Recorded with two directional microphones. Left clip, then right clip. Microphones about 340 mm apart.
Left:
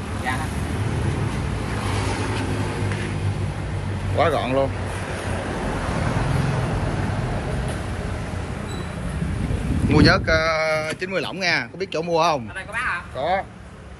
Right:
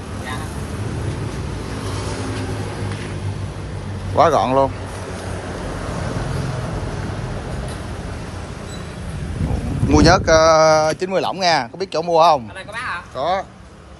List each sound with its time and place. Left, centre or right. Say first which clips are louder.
4.2 s speech: right 6 dB; centre
9.8 s speech: right 4 dB; centre